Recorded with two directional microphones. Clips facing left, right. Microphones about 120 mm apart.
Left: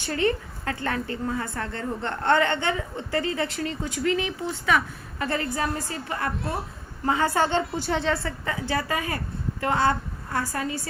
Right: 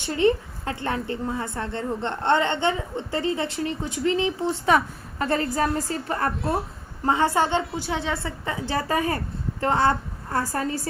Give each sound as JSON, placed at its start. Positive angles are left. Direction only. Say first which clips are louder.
{"t": 0.0, "sound": "a woman's voice", "louder": "right 4 dB", "side_deg": -20}
{"t": 7.0, "sound": "a woman's voice", "louder": "right 2 dB", "side_deg": -25}